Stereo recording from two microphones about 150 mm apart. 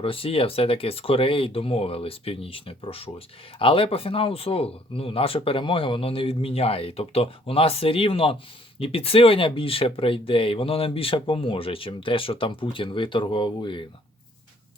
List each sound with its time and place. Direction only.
0.0 s speech: 40° left (ahead or behind)